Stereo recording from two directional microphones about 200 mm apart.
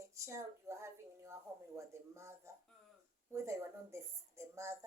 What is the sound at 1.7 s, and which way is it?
Speech, 15° right (ahead or behind).